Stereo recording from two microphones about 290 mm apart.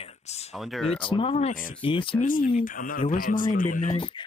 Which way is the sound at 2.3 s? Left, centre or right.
Left.